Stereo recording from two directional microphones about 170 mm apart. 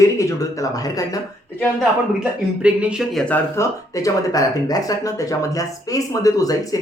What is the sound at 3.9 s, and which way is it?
Speech, 20° left (ahead or behind).